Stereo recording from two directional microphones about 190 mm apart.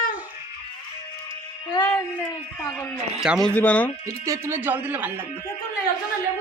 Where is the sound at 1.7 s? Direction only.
20° left (ahead or behind).